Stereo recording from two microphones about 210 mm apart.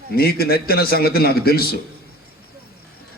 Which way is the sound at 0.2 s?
45° left (ahead or behind).